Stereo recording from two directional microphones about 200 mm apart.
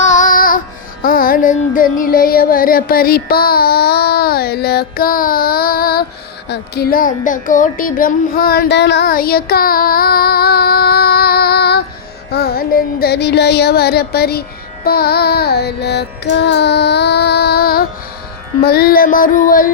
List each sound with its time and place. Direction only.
0.0 s music: 40° left (ahead or behind)
1.0 s child singing: 45° left (ahead or behind)
14.8 s carnatic music: 50° left (ahead or behind)
18.6 s child singing: 50° left (ahead or behind)